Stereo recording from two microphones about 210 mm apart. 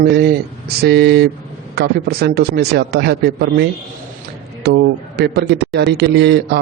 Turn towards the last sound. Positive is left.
turn(degrees=-55)  # may be behind; listen again after turning